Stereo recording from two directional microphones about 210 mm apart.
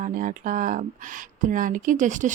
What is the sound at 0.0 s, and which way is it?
Speech, 40° right (ahead or behind).